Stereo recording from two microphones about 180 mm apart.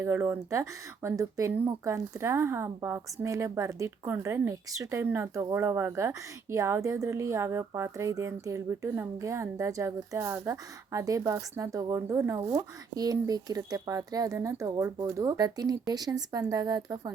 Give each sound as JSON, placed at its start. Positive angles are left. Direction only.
{"t": 0.0, "sound": "speech", "side_deg": -10}